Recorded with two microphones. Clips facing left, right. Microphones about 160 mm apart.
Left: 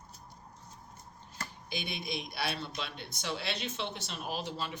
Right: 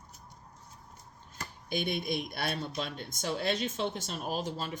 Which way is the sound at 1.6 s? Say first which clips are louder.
Right 7 dB; 50° right (ahead or behind).